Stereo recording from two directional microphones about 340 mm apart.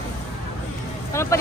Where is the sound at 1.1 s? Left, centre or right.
Centre.